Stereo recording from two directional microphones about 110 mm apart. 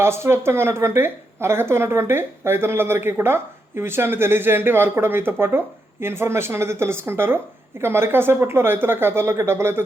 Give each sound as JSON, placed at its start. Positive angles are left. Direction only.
{"t": 0.0, "sound": "speech", "side_deg": -25}